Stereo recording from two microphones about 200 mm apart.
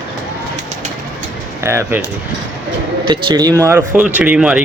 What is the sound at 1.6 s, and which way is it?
Speech, 15° right (ahead or behind).